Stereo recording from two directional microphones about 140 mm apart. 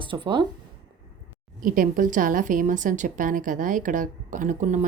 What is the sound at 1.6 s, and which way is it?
A woman's voice, 80° right.